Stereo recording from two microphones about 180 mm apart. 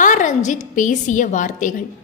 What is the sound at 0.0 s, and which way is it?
A woman's voice, 45° left (ahead or behind).